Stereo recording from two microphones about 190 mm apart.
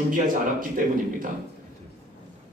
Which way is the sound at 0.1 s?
45° right (ahead or behind).